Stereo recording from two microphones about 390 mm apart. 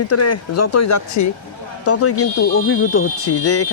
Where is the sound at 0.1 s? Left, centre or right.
Left.